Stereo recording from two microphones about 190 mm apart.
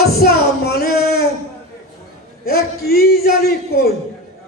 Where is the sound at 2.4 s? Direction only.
55° left (ahead or behind).